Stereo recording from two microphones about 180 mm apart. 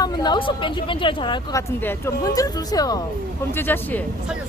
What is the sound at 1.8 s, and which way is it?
A woman's voice, 15° left (ahead or behind).